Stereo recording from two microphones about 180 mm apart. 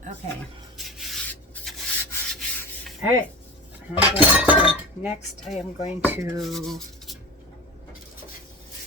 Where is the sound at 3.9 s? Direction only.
5° right (ahead or behind).